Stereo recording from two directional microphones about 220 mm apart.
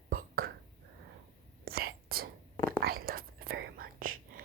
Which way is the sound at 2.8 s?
45° right (ahead or behind).